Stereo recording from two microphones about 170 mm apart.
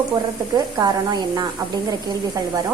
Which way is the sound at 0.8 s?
20° right (ahead or behind).